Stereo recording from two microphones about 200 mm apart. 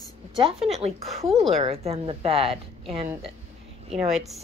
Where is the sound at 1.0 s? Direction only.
Centre (ahead or behind).